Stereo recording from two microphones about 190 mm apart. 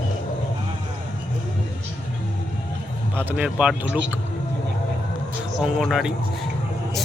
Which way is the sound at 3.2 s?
5° right (ahead or behind).